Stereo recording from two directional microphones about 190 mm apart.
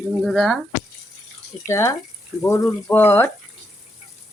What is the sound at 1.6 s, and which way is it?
Speech, 15° left (ahead or behind).